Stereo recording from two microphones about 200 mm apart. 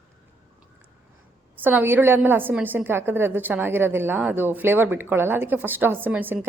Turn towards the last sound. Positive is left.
turn(degrees=-10)  # may be behind; listen again after turning